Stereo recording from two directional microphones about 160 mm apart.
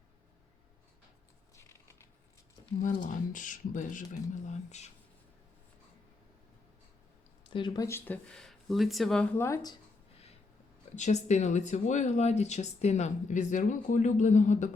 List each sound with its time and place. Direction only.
2.8 s speech: 55° left (ahead or behind)
7.5 s speech: 25° left (ahead or behind)
10.9 s speech: 45° left (ahead or behind)